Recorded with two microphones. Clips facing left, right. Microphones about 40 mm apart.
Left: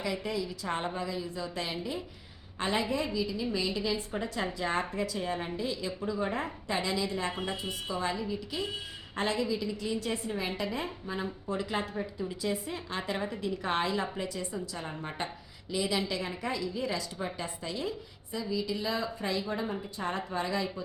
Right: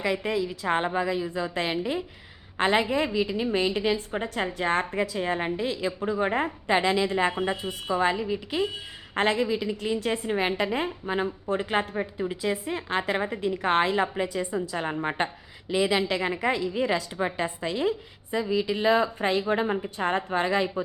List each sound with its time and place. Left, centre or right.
0.0 s a woman's voice: right
7.4 s a woman's voice: right
7.9 s a woman's voice: right